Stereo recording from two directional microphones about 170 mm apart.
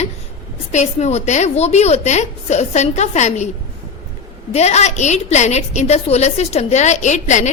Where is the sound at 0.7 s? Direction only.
40° left (ahead or behind).